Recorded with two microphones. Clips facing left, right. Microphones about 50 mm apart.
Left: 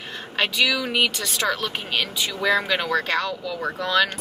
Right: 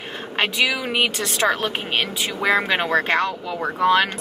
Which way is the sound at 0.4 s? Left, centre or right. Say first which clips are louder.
Right 1 dB; right.